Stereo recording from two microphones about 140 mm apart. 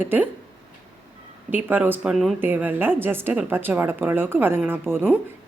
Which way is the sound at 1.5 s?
15° right (ahead or behind).